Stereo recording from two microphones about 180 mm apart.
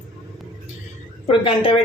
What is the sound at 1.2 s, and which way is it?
Speech, 30° left (ahead or behind).